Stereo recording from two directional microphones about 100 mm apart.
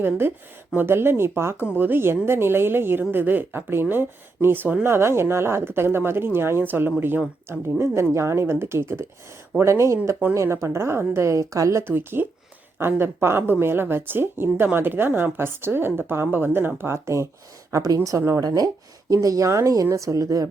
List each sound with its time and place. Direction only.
0.0 s speech: 20° right (ahead or behind)